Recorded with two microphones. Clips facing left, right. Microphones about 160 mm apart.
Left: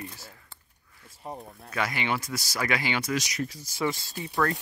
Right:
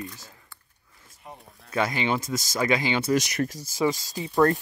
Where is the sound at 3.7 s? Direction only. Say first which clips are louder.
Right 4 dB; 20° right (ahead or behind).